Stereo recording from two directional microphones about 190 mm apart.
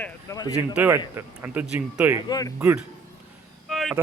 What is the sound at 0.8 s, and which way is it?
Speech, 10° right (ahead or behind).